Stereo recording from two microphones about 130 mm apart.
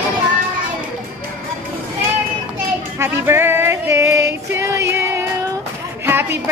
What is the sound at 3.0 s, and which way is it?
Music, 20° right (ahead or behind).